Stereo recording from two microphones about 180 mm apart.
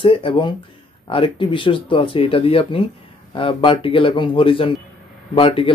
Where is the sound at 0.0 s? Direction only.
30° left (ahead or behind).